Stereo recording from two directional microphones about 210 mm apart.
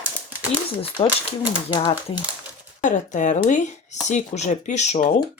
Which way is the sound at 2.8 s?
35° left (ahead or behind).